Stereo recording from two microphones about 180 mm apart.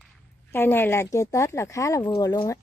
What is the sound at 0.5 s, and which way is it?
Speech, 10° left (ahead or behind).